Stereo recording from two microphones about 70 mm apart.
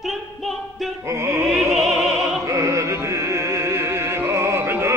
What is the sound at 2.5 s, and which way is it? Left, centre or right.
Music, right.